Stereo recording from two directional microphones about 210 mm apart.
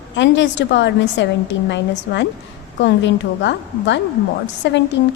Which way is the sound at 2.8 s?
60° left (ahead or behind).